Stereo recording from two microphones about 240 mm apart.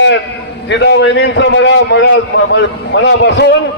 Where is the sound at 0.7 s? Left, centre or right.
Left.